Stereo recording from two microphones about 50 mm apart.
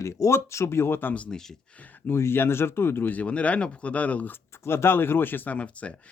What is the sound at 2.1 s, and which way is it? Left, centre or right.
Speech, left.